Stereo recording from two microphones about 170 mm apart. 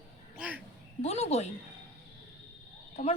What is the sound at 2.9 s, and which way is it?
Speech, 40° left (ahead or behind).